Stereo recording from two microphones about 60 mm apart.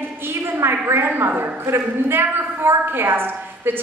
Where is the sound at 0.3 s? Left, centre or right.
Right.